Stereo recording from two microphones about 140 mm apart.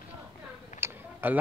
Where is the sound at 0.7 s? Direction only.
15° right (ahead or behind).